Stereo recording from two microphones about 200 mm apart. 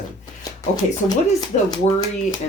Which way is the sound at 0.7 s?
20° left (ahead or behind).